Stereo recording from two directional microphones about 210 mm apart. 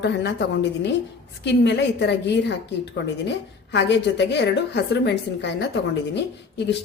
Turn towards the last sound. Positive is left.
turn(degrees=55)  # may be behind; listen again after turning